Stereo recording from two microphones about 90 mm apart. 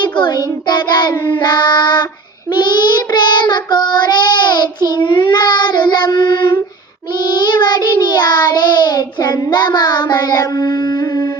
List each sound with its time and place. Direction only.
0.0 s child singing: 55° left (ahead or behind)